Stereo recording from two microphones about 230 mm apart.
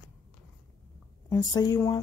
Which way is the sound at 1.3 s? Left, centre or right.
Centre.